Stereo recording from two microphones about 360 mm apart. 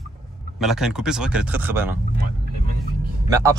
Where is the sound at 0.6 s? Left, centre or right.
Centre.